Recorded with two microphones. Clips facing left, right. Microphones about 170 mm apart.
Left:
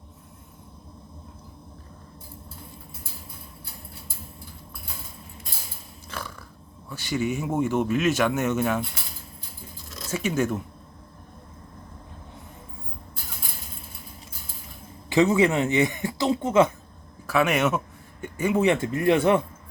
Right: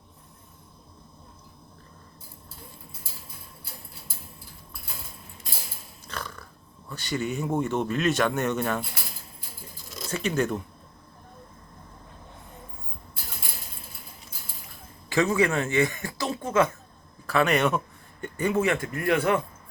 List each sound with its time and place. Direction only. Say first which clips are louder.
6.1 s dog: left 1 dB; 10° left (ahead or behind)
6.9 s speech: left 3 dB; 10° left (ahead or behind)
9.9 s speech: left 1 dB; 5° left (ahead or behind)
15.1 s speech: left 3 dB; 20° left (ahead or behind)
17.2 s speech: left 1 dB; 5° left (ahead or behind)
18.6 s speech: left 5 dB; 20° left (ahead or behind)